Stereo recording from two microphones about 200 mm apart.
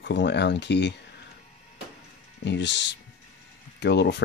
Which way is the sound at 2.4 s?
60° left (ahead or behind).